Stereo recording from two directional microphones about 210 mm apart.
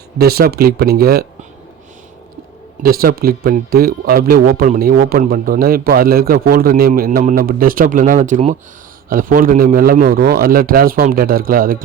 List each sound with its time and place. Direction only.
0.2 s speech: 45° right (ahead or behind)
2.8 s speech: 45° right (ahead or behind)